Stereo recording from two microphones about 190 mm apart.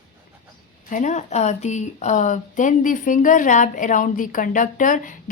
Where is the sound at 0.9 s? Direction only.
40° left (ahead or behind).